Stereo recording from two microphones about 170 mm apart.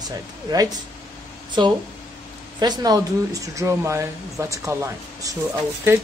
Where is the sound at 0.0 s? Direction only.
20° right (ahead or behind).